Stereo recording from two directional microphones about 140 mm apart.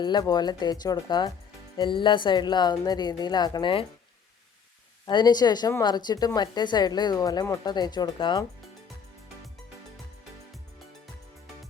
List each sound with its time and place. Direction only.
0.0 s speech: 30° left (ahead or behind)
5.0 s speech: 30° left (ahead or behind)